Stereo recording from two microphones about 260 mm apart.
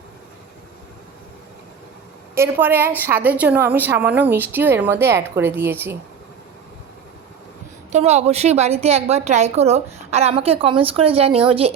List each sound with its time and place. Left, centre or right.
2.3 s speech: centre
7.9 s a woman's voice: right